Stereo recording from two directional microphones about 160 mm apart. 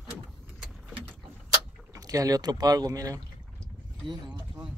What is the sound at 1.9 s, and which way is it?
Speech, 20° right (ahead or behind).